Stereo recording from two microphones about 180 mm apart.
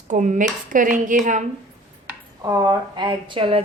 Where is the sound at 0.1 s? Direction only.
45° right (ahead or behind).